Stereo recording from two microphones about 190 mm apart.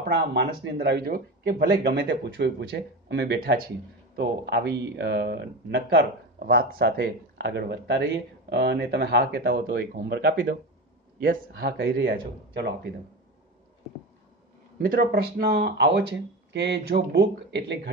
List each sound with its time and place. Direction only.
0.3 s speech: 60° right (ahead or behind)
14.8 s speech: 50° right (ahead or behind)